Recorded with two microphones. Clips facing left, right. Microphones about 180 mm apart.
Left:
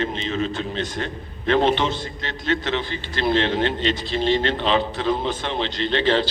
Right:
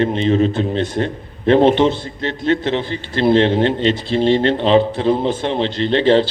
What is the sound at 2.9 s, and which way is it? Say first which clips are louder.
A man's voice: right 9 dB; 40° right (ahead or behind).